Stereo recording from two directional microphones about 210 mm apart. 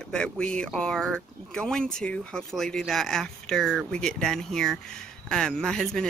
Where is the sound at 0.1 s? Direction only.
5° left (ahead or behind).